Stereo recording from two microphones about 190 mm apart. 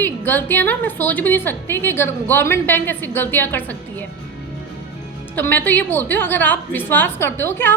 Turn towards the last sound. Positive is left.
turn(degrees=10)  # may be behind; listen again after turning